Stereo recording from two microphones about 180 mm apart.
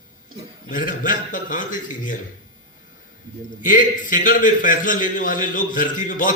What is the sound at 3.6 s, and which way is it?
A man's voice, 45° left (ahead or behind).